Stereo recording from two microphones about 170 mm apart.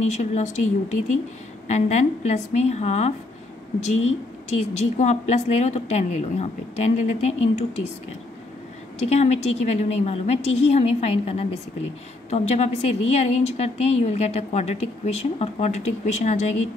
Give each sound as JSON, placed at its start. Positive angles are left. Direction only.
{"t": 0.0, "sound": "speech", "side_deg": 45}
{"t": 1.7, "sound": "a woman's voice", "side_deg": 45}
{"t": 9.0, "sound": "a woman's voice", "side_deg": 40}